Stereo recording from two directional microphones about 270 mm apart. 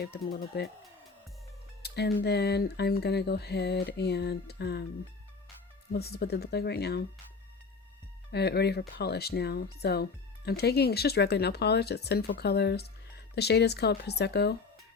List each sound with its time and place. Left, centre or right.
0.3 s speech: left
1.8 s speech: left
5.9 s speech: left
8.3 s speech: left